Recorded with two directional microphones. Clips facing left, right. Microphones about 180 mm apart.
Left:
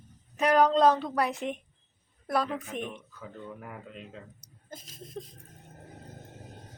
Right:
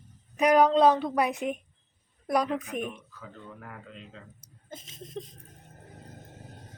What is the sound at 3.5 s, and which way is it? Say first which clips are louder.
Speech: left 2 dB; 10° left (ahead or behind).